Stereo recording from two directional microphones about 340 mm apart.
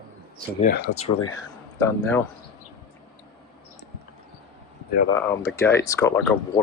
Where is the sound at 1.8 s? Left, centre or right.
Centre.